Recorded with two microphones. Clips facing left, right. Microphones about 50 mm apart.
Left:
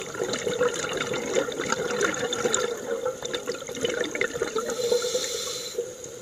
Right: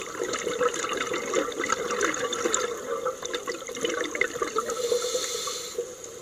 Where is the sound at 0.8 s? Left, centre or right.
Centre.